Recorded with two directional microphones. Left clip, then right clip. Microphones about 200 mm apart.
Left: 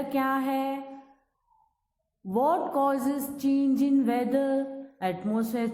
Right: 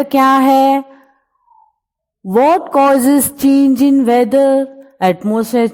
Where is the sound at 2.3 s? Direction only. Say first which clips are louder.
Right 14 dB; 45° right (ahead or behind).